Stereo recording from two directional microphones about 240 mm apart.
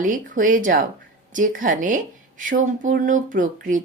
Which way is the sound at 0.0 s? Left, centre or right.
Right.